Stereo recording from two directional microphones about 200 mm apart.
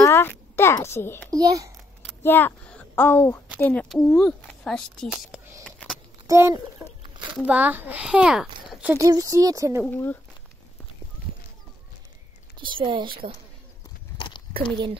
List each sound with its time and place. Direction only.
0.0 s a child's voice: 10° left (ahead or behind)
1.3 s speech: 15° right (ahead or behind)
2.0 s speech: 10° left (ahead or behind)
5.6 s a sound: 5° left (ahead or behind)
6.2 s a child's voice: 15° right (ahead or behind)
8.8 s speech: 15° right (ahead or behind)
9.8 s speech: 10° left (ahead or behind)
12.5 s speech: 25° right (ahead or behind)
14.1 s biting: 25° left (ahead or behind)